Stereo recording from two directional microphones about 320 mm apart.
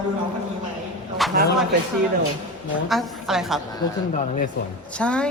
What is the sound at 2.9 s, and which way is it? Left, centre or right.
Speech, centre.